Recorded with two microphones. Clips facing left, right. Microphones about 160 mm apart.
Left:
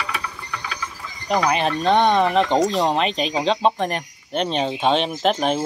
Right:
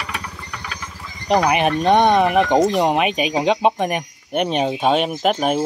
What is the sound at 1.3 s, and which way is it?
Speech, 15° right (ahead or behind).